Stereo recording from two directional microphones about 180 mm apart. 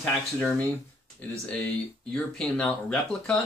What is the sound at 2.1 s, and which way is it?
Speech, 5° left (ahead or behind).